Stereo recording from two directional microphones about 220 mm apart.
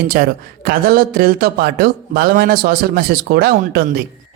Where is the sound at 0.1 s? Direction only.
40° right (ahead or behind).